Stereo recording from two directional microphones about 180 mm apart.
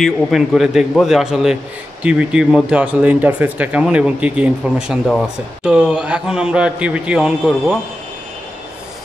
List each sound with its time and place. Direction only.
0.0 s speech: centre (ahead or behind)